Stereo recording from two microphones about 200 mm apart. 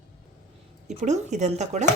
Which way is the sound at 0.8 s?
35° right (ahead or behind).